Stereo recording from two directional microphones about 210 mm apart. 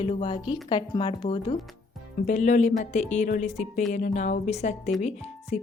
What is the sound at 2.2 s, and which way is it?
Speech, 35° left (ahead or behind).